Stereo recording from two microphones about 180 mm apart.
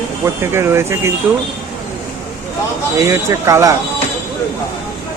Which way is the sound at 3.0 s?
15° right (ahead or behind).